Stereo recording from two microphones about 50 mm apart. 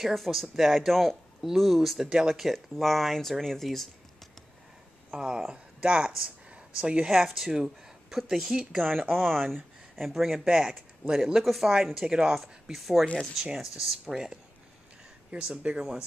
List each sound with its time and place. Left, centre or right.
0.0 s speech: centre
2.0 s a woman's voice: centre
2.3 s speech: centre
5.1 s a woman's voice: centre
7.2 s a woman's voice: centre
9.1 s speech: centre
11.4 s a woman's voice: centre
12.7 s a woman's voice: centre